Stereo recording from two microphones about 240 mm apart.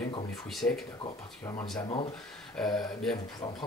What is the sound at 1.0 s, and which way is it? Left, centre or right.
Speech, centre.